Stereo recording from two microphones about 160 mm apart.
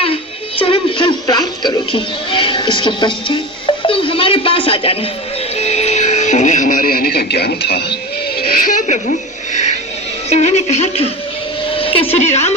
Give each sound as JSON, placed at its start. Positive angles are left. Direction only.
{"t": 0.6, "sound": "speech", "side_deg": 35}
{"t": 3.8, "sound": "a sound", "side_deg": 35}
{"t": 5.5, "sound": "music", "side_deg": 40}
{"t": 8.4, "sound": "music", "side_deg": 70}
{"t": 10.2, "sound": "speech", "side_deg": 45}
{"t": 11.7, "sound": "a sound", "side_deg": 35}
{"t": 12.1, "sound": "speech", "side_deg": 45}